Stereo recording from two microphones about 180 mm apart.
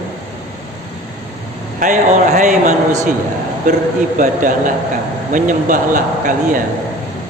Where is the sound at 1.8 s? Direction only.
50° right (ahead or behind).